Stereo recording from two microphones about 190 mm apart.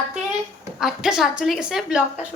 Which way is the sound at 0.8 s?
5° right (ahead or behind).